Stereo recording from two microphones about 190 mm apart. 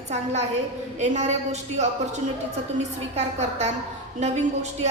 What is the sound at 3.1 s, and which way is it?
Speech, 35° right (ahead or behind).